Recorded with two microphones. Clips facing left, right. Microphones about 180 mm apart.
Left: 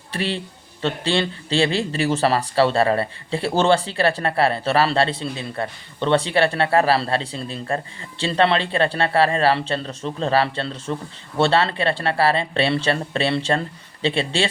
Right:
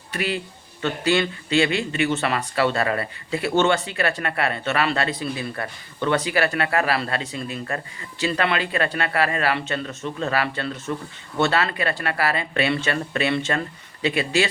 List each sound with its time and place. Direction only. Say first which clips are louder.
0.1 s speech: left 1 dB; 30° left (ahead or behind)